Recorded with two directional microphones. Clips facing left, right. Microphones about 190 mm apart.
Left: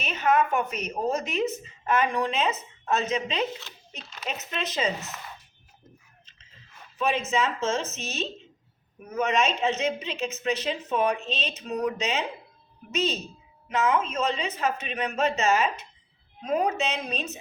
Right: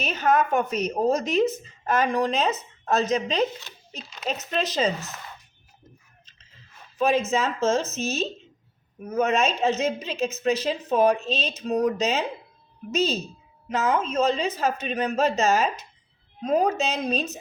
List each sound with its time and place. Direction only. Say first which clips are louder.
0.0 s a woman's voice: right 1 dB; 40° right (ahead or behind)
7.0 s a woman's voice: right 4 dB; 40° right (ahead or behind)